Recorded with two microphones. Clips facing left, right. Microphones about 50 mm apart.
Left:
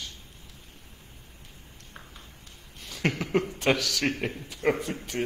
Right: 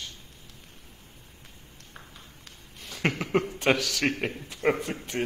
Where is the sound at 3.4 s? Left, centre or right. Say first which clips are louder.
Even; right.